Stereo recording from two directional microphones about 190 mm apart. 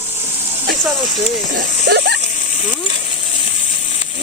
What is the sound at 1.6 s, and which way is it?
Speech, 60° right (ahead or behind).